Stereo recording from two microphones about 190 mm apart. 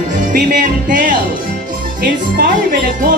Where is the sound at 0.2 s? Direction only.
45° right (ahead or behind).